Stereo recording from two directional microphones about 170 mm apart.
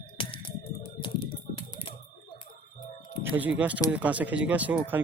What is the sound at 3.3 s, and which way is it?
Speech, 10° right (ahead or behind).